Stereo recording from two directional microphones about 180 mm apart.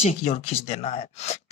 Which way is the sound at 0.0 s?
35° left (ahead or behind).